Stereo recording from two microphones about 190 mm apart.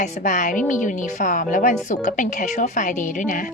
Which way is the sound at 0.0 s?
40° left (ahead or behind).